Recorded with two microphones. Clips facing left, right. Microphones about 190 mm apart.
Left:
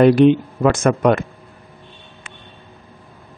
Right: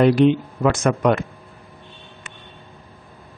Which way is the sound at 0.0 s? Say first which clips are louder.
Left 4 dB; 55° left (ahead or behind).